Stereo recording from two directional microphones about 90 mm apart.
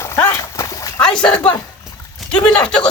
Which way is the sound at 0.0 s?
30° left (ahead or behind).